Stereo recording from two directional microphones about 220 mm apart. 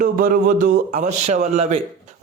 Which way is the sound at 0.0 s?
40° right (ahead or behind).